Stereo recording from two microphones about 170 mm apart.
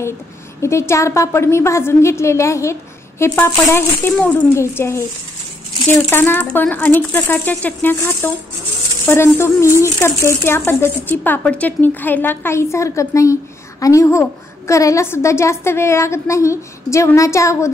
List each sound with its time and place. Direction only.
0.6 s speech: 15° left (ahead or behind)